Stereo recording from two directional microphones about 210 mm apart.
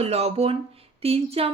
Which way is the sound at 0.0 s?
30° right (ahead or behind).